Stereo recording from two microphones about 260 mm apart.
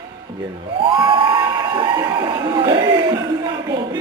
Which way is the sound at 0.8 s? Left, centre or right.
Centre.